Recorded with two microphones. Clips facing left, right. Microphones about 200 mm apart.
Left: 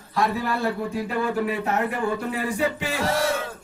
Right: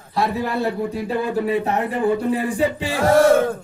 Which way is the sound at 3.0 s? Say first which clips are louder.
Right 12 dB; 50° right (ahead or behind).